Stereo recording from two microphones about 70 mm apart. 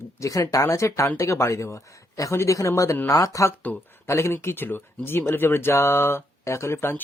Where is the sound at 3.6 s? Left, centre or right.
Left.